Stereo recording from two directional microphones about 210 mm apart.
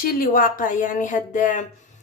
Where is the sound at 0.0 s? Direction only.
40° left (ahead or behind).